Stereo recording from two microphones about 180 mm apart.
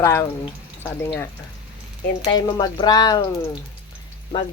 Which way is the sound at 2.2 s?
25° left (ahead or behind).